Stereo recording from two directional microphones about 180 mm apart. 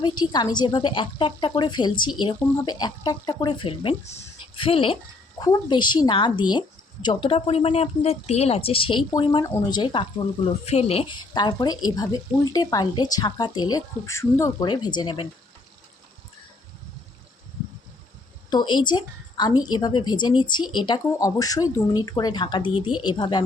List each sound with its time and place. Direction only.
0.0 s a woman's voice: 25° left (ahead or behind)
18.5 s a woman's voice: 25° left (ahead or behind)